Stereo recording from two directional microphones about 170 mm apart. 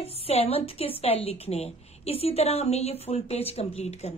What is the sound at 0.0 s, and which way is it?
A woman's voice, 35° left (ahead or behind).